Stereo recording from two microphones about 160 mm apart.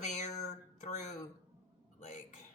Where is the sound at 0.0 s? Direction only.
50° left (ahead or behind).